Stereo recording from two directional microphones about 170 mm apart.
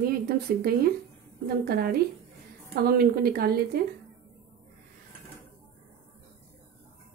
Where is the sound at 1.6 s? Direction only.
65° right (ahead or behind).